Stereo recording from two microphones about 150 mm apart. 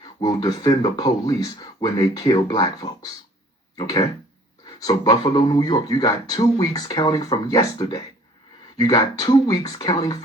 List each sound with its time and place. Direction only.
0.0 s a man's voice: 30° left (ahead or behind)